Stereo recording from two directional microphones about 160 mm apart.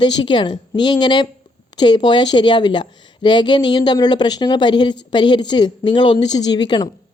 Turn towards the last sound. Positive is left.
turn(degrees=30)  # may be behind; listen again after turning